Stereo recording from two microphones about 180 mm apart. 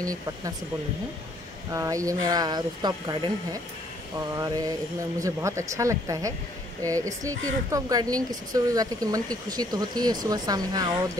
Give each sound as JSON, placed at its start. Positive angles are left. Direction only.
{"t": 0.0, "sound": "speech", "side_deg": -20}
{"t": 1.7, "sound": "speech", "side_deg": -20}
{"t": 4.4, "sound": "speech", "side_deg": -20}